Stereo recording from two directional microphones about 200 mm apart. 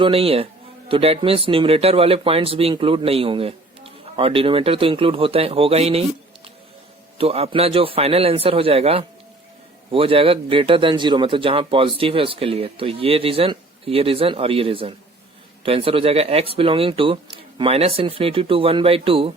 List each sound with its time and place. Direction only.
0.0 s speech: 30° right (ahead or behind)
7.2 s speech: 30° right (ahead or behind)